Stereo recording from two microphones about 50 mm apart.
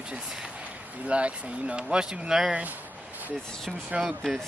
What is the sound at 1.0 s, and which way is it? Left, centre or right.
Speech, right.